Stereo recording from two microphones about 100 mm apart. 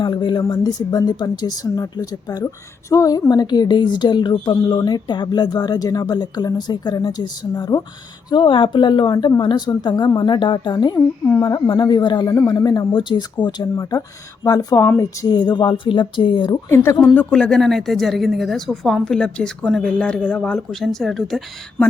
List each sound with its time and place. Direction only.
0.0 s speech: 50° left (ahead or behind)
8.3 s speech: 55° left (ahead or behind)
12.9 s speech: 50° left (ahead or behind)
14.4 s speech: 40° left (ahead or behind)
14.8 s speech: 25° left (ahead or behind)
15.3 s speech: 45° left (ahead or behind)
16.6 s speech: 25° left (ahead or behind)
17.2 s a woman's voice: 10° left (ahead or behind)